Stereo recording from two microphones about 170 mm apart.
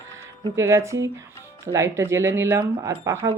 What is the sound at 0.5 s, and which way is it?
Speech, 15° right (ahead or behind).